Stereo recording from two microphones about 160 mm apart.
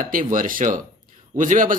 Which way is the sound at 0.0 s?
55° right (ahead or behind).